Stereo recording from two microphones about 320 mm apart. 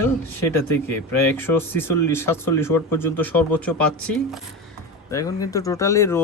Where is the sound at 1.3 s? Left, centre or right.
Centre.